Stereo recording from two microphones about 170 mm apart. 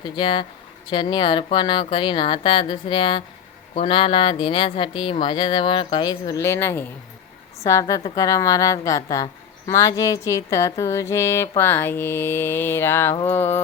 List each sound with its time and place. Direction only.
0.0 s a woman's voice: 30° left (ahead or behind); by 13.6 s 10° left (ahead or behind)